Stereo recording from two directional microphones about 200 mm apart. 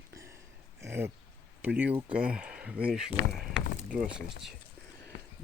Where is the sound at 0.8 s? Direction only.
10° right (ahead or behind).